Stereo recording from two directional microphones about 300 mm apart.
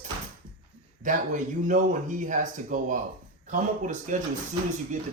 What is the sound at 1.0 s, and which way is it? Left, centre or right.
Speech, right.